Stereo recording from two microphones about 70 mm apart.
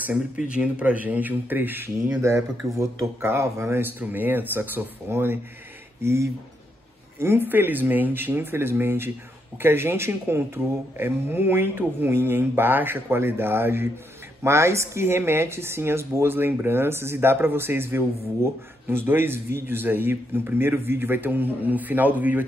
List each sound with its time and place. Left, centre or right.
0.4 s a man's voice: centre
2.2 s speech: right
4.0 s a man's voice: right
6.0 s speech: right